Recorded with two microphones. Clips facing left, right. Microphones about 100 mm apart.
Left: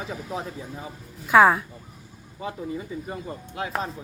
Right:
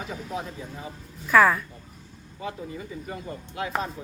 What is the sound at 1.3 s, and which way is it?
Speech, 20° left (ahead or behind).